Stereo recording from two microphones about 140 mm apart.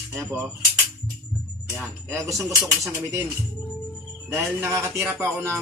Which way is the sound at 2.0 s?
20° right (ahead or behind).